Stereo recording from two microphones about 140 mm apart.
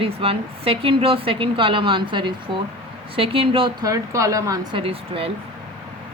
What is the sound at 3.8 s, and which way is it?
Speech, 25° right (ahead or behind).